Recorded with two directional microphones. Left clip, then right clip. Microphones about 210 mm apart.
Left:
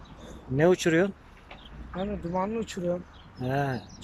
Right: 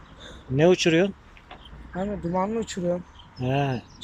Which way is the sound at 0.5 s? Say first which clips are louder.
Right 3 dB; centre (ahead or behind).